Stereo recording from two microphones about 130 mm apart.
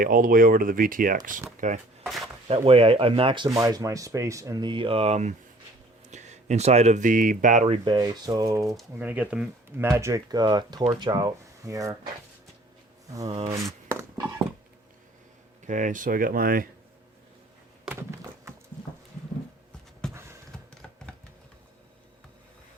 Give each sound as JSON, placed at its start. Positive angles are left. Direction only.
{"t": 0.0, "sound": "speech", "side_deg": -90}
{"t": 1.5, "sound": "speech", "side_deg": -75}
{"t": 2.0, "sound": "a sound", "side_deg": 0}
{"t": 2.5, "sound": "speech", "side_deg": -45}
{"t": 3.5, "sound": "speech", "side_deg": -25}
{"t": 7.9, "sound": "speech", "side_deg": -30}
{"t": 9.0, "sound": "speech", "side_deg": -10}
{"t": 13.1, "sound": "speech", "side_deg": -25}
{"t": 13.3, "sound": "speech", "side_deg": -50}
{"t": 13.8, "sound": "a sound", "side_deg": -20}
{"t": 15.6, "sound": "speech", "side_deg": -75}
{"t": 18.5, "sound": "horse", "side_deg": -20}
{"t": 20.0, "sound": "a sound", "side_deg": 5}